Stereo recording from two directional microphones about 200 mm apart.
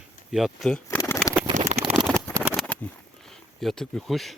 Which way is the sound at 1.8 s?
25° right (ahead or behind).